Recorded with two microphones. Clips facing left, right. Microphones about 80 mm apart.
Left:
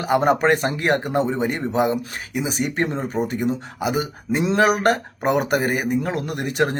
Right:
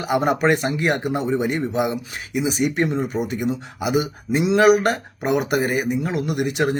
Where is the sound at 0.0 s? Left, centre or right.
Left.